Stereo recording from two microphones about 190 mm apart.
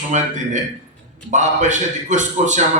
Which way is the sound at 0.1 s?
40° right (ahead or behind).